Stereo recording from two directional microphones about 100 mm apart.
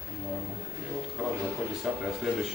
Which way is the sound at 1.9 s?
10° right (ahead or behind).